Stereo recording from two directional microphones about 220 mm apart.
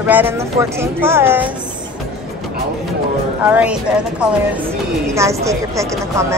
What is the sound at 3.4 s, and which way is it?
A woman's voice, 5° right (ahead or behind).